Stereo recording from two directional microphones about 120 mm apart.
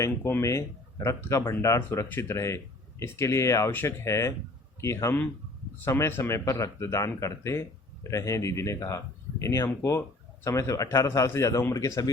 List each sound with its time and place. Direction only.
0.0 s speech: 25° left (ahead or behind)